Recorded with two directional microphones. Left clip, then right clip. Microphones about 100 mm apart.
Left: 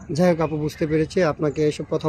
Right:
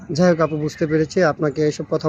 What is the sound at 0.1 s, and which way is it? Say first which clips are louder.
Speech: right 3 dB; 15° left (ahead or behind).